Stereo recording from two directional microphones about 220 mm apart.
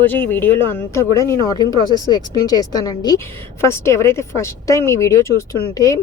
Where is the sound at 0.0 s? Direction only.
10° left (ahead or behind).